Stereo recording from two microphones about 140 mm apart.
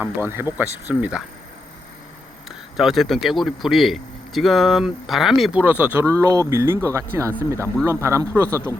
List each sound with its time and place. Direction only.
0.0 s speech: 15° right (ahead or behind)
2.7 s speech: centre (ahead or behind); by 8.7 s 20° right (ahead or behind)